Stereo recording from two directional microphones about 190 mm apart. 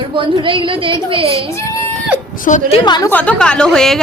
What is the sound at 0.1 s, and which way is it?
A woman's voice, 25° right (ahead or behind).